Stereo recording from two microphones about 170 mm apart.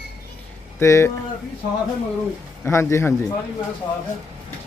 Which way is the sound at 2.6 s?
15° left (ahead or behind).